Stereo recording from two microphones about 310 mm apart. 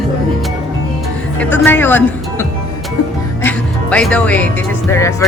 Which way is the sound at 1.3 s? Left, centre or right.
Centre.